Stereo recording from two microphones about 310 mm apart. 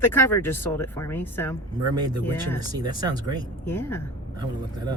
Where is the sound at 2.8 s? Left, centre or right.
Centre.